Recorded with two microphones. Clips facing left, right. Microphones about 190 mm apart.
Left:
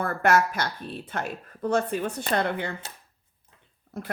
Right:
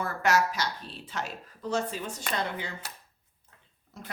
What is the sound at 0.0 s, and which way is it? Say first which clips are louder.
Speech: left 4 dB; 55° left (ahead or behind).